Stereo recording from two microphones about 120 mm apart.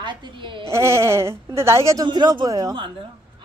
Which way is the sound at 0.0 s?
40° right (ahead or behind).